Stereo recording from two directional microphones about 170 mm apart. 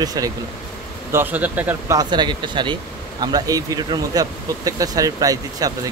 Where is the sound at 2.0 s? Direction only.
25° right (ahead or behind).